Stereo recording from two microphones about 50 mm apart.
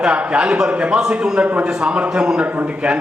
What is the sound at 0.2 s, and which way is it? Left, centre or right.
A man's voice, right.